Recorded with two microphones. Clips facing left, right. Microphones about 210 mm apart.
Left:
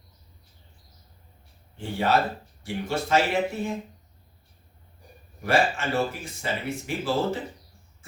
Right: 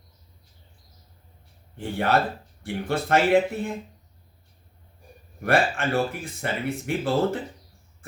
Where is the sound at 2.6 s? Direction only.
55° right (ahead or behind).